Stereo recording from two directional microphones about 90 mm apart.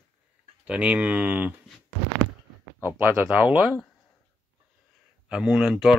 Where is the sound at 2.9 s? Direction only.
20° right (ahead or behind).